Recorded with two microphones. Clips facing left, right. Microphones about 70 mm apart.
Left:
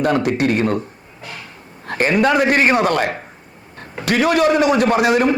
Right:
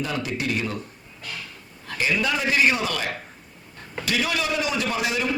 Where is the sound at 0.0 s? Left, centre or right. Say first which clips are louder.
Left 11 dB; left.